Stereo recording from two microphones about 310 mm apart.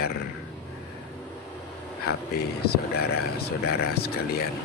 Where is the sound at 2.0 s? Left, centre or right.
Left.